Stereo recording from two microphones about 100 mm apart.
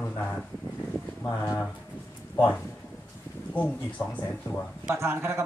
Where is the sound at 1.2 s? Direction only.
30° left (ahead or behind).